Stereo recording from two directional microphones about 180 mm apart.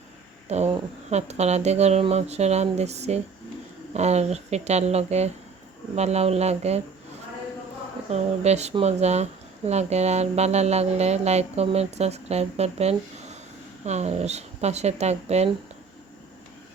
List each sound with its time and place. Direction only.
0.4 s speech: 35° right (ahead or behind)
8.1 s speech: 40° right (ahead or behind)